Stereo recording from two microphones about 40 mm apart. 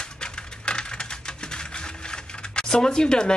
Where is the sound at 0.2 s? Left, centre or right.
Left.